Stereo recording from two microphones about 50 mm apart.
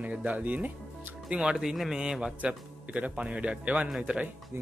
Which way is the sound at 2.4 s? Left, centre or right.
Right.